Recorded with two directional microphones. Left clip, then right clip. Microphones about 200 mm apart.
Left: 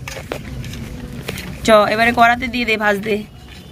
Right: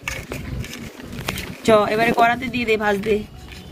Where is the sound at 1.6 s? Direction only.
Centre (ahead or behind).